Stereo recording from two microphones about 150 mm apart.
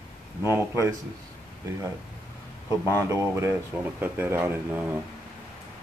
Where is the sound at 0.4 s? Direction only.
15° right (ahead or behind).